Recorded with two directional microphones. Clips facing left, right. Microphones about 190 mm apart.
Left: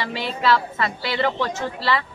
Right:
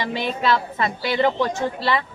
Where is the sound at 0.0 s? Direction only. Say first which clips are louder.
Right 1 dB; 15° right (ahead or behind).